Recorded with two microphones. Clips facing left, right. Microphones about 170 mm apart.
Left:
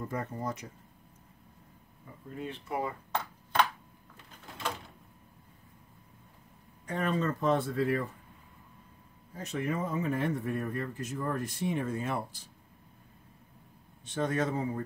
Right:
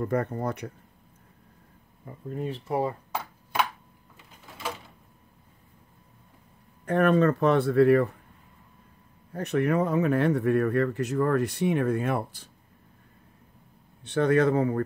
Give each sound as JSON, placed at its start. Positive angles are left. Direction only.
{"t": 0.0, "sound": "speech", "side_deg": -65}
{"t": 2.0, "sound": "speech", "side_deg": -40}
{"t": 3.1, "sound": "a sound", "side_deg": -10}
{"t": 6.9, "sound": "speech", "side_deg": -65}
{"t": 9.3, "sound": "speech", "side_deg": -65}
{"t": 14.0, "sound": "speech", "side_deg": -65}